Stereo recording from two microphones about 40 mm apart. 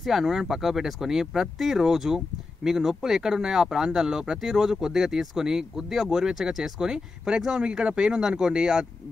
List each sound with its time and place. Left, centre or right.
0.0 s speech: centre